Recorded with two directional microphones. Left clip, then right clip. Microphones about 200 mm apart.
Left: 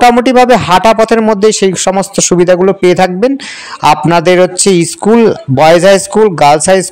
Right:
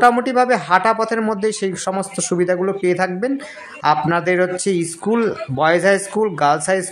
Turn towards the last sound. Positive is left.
turn(degrees=35)  # may be behind; listen again after turning